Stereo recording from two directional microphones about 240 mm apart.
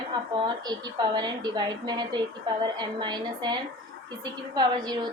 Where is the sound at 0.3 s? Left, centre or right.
Centre.